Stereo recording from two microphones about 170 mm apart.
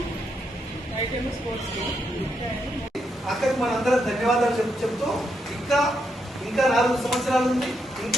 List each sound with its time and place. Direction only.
3.2 s a man's voice: centre (ahead or behind)